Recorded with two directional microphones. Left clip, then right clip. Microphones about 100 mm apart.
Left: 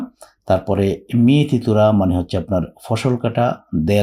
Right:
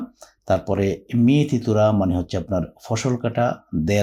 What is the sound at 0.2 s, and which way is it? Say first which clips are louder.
Speech: left 4 dB; 35° left (ahead or behind).